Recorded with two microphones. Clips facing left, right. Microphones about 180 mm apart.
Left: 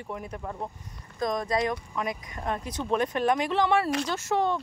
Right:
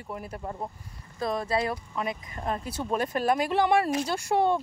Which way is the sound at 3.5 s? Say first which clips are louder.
Right 1 dB; 10° right (ahead or behind).